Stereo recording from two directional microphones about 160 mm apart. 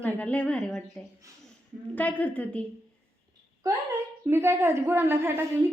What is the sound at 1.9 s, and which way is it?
Speech, 10° left (ahead or behind).